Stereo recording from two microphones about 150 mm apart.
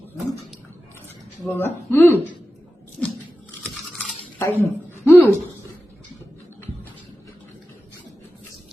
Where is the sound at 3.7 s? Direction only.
Centre (ahead or behind).